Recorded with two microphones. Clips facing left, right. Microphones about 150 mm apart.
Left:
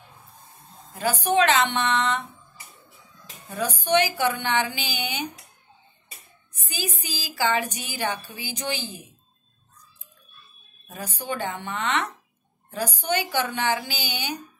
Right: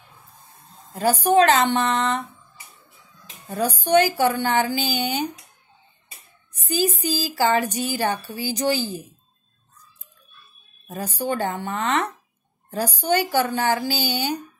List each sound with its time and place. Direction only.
0.9 s speech: 40° right (ahead or behind)
3.4 s speech: 40° right (ahead or behind)
6.7 s speech: 40° right (ahead or behind)
10.9 s speech: 45° right (ahead or behind)